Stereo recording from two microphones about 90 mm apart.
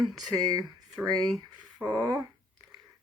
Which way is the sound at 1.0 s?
10° right (ahead or behind).